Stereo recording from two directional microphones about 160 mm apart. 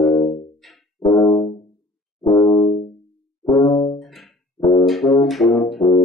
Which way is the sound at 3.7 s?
30° left (ahead or behind).